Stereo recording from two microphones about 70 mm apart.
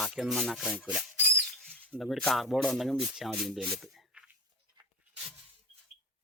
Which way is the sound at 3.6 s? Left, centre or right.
Centre.